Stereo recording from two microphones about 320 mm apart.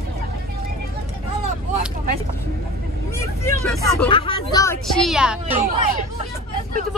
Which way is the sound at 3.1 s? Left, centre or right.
Centre.